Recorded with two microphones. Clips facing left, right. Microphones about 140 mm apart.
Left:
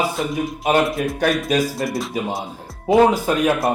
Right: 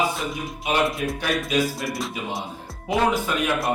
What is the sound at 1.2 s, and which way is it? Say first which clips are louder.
Speech: left 5 dB; 45° left (ahead or behind).